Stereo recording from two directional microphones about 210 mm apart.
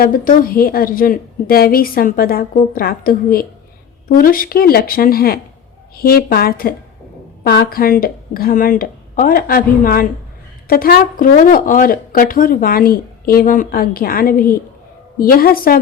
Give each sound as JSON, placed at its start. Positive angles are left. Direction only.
{"t": 0.0, "sound": "speech", "side_deg": 45}